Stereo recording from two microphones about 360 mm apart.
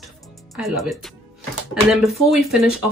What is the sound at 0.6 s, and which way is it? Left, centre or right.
Speech, centre.